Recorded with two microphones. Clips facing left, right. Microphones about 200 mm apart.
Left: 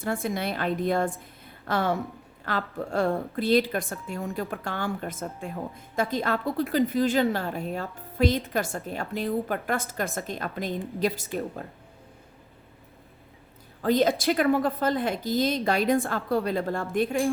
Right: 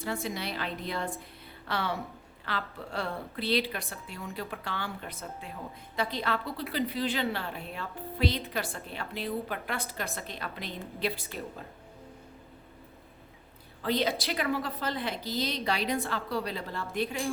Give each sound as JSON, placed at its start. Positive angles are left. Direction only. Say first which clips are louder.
{"t": 0.0, "sound": "a woman's voice", "louder": "left 6 dB", "side_deg": 50}
{"t": 13.8, "sound": "a woman's voice", "louder": "left 7 dB", "side_deg": 45}